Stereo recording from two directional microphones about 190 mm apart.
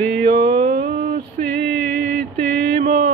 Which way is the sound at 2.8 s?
35° right (ahead or behind).